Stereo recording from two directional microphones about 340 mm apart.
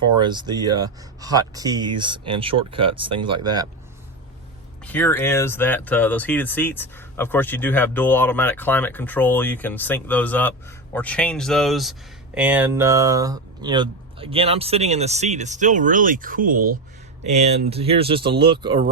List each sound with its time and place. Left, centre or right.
0.2 s speech: centre
4.9 s speech: centre